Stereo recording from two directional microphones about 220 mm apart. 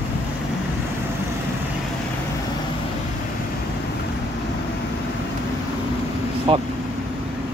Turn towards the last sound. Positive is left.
turn(degrees=-25)  # may be behind; listen again after turning